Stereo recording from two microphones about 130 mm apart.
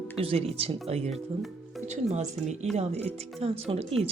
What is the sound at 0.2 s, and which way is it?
Speech, 50° right (ahead or behind).